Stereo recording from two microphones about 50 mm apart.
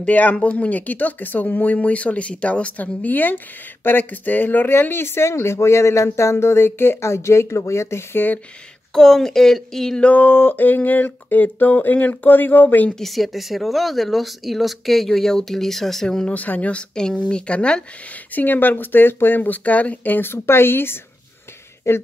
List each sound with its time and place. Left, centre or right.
0.0 s speech: left
8.1 s speech: left
8.9 s speech: centre
10.0 s speech: left
13.0 s speech: centre
16.3 s speech: left
16.7 s speech: centre
18.3 s speech: left
21.8 s speech: left